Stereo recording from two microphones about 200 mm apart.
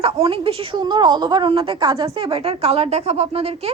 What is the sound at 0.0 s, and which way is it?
A woman's voice, 30° right (ahead or behind).